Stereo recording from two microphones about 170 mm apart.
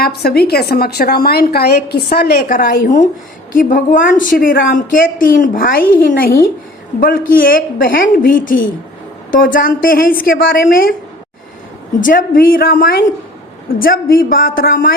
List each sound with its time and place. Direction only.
0.0 s a woman's voice: 65° left (ahead or behind)
12.0 s a woman's voice: 55° left (ahead or behind)